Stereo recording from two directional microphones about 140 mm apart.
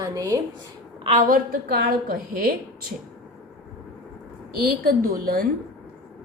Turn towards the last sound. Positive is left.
turn(degrees=-90)